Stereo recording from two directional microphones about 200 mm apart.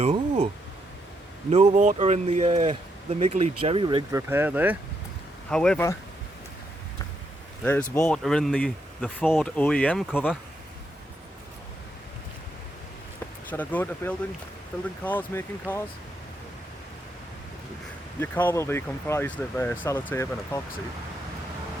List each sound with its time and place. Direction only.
0.0 s speech: 35° right (ahead or behind)
1.5 s speech: 35° right (ahead or behind)
4.1 s speech: 10° right (ahead or behind)
5.5 s speech: 5° left (ahead or behind)
7.6 s speech: 5° left (ahead or behind)
13.5 s speech: 10° left (ahead or behind)
18.2 s speech: 10° left (ahead or behind)